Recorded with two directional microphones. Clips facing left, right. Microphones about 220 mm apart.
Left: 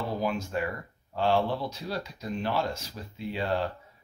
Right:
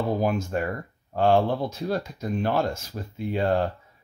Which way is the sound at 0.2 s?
50° right (ahead or behind).